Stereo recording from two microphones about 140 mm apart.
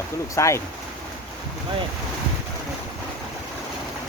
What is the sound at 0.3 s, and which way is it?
Speech, 20° left (ahead or behind).